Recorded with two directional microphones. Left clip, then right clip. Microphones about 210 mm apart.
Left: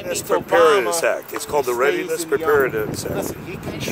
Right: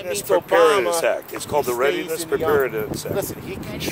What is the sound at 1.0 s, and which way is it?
Speech, 10° left (ahead or behind).